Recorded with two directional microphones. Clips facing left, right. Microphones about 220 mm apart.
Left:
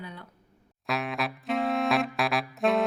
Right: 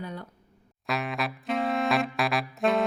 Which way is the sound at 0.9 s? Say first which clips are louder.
Even; centre (ahead or behind).